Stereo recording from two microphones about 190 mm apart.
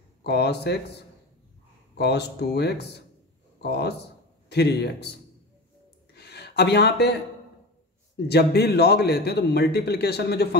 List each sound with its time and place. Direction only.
0.2 s a man's voice: 60° left (ahead or behind)
2.0 s a man's voice: 60° left (ahead or behind)
6.1 s a sound: 60° left (ahead or behind)
8.3 s a man's voice: 60° left (ahead or behind)